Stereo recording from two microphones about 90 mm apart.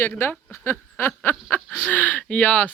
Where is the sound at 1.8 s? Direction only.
15° left (ahead or behind).